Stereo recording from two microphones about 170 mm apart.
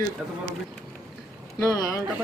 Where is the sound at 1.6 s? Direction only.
15° left (ahead or behind).